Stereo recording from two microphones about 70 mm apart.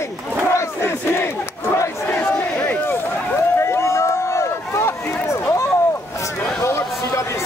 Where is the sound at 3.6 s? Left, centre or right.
Left.